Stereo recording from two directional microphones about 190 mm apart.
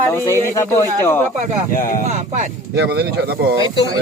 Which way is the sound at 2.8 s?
60° right (ahead or behind).